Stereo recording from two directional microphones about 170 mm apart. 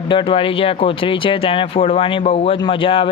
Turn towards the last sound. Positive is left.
turn(degrees=30)  # may be behind; listen again after turning